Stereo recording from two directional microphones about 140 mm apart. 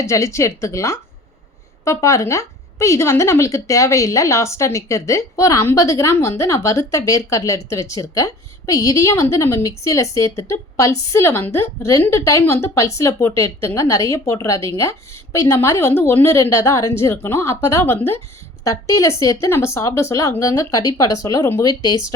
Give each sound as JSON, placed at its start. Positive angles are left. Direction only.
{"t": 0.0, "sound": "a woman's voice", "side_deg": 20}